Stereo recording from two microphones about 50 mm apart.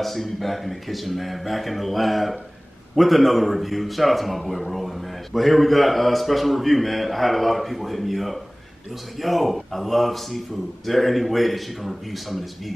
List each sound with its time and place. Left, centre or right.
0.0 s a man's voice: centre